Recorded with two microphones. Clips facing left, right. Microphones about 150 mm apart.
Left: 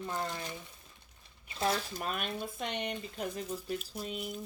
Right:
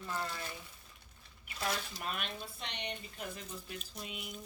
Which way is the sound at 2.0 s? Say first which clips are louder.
Left 5 dB; 45° left (ahead or behind).